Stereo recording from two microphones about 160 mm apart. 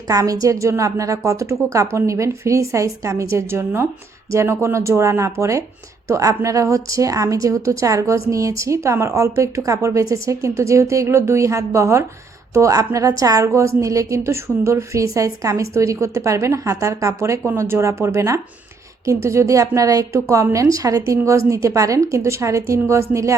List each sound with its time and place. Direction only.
0.1 s a woman's voice: 20° right (ahead or behind)